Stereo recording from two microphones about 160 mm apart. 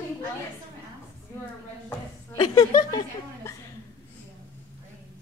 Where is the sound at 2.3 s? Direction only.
35° left (ahead or behind).